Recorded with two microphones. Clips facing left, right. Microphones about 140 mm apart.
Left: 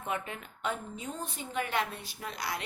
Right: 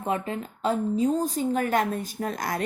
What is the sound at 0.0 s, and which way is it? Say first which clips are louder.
A woman's voice: right 8 dB; 30° right (ahead or behind).